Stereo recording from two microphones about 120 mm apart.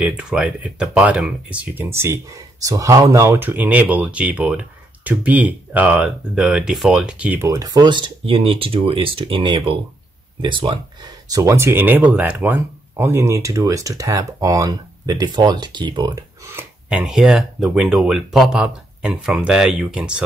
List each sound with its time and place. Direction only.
0.0 s speech: 5° right (ahead or behind)
1.9 s speech: 20° right (ahead or behind)
7.4 s speech: 30° right (ahead or behind)
16.9 s speech: 5° right (ahead or behind)